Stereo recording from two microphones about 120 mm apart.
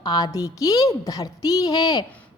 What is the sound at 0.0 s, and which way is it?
A woman's voice, 35° left (ahead or behind).